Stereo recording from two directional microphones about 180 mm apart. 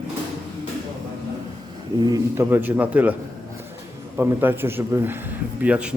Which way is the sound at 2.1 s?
15° right (ahead or behind).